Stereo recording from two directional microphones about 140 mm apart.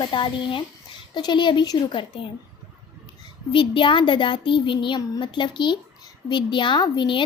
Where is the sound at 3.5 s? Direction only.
35° left (ahead or behind).